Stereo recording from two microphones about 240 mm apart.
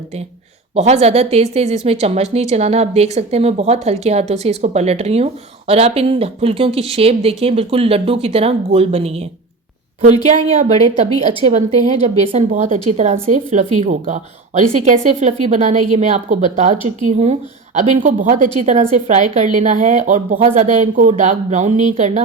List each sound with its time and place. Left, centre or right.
0.8 s a woman's voice: right
10.2 s a woman's voice: right